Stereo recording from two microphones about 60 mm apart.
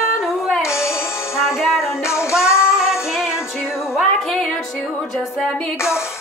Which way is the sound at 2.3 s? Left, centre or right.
Centre.